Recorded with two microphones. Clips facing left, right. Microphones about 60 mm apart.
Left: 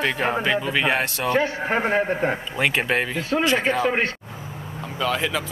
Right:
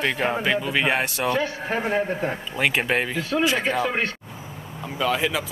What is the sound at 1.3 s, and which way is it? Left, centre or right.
A man's voice, left.